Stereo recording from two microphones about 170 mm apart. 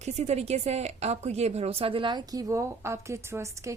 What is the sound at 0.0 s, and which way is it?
A woman's voice, 40° right (ahead or behind).